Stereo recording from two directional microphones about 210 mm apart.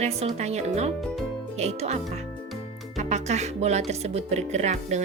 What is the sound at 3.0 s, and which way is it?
Music, 35° right (ahead or behind).